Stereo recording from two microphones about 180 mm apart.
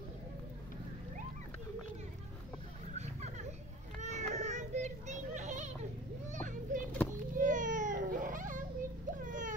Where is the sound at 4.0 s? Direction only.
40° right (ahead or behind).